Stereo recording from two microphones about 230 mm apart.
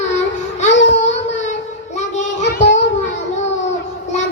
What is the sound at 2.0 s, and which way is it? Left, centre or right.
Child singing, left.